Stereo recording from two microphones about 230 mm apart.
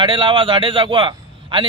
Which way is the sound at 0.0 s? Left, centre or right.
Right.